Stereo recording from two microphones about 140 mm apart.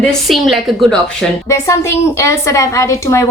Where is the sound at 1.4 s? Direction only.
20° left (ahead or behind).